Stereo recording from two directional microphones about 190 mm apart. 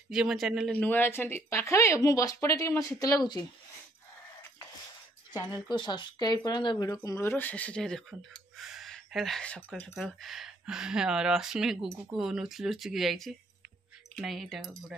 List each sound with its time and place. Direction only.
0.1 s speech: centre (ahead or behind); by 3.4 s 20° left (ahead or behind)
5.3 s speech: 20° left (ahead or behind); by 14.7 s centre (ahead or behind)